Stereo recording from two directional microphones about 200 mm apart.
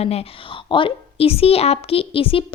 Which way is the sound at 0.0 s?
30° left (ahead or behind).